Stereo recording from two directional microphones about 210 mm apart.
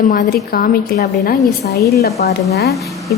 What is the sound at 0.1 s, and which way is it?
A woman's voice, 40° left (ahead or behind).